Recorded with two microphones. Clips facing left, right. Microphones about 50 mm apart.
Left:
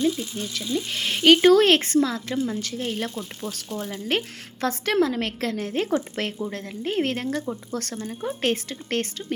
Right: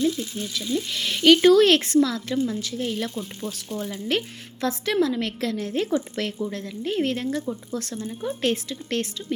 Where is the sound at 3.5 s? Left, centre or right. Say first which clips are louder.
Even; left.